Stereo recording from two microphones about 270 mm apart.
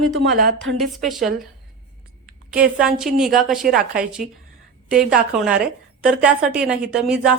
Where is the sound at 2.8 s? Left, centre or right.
Centre.